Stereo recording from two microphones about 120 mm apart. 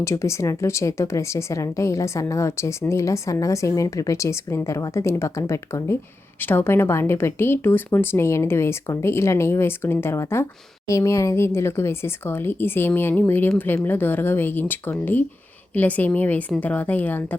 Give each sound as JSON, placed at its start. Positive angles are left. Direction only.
{"t": 0.0, "sound": "a woman's voice", "side_deg": 25}